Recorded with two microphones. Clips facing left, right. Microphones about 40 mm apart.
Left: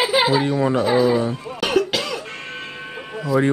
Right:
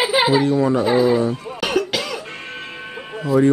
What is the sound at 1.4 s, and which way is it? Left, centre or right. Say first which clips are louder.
Cough: left 1 dB; centre.